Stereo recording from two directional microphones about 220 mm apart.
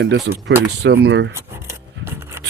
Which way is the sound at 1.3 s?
10° right (ahead or behind).